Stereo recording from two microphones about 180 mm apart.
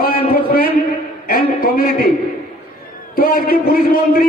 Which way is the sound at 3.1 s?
55° left (ahead or behind).